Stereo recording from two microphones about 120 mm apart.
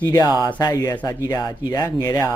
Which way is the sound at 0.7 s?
15° left (ahead or behind).